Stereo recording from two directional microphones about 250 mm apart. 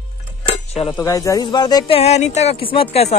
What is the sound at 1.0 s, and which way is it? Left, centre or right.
Speech, centre.